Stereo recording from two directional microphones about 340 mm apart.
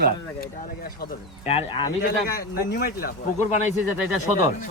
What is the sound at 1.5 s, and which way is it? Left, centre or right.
Speech, centre.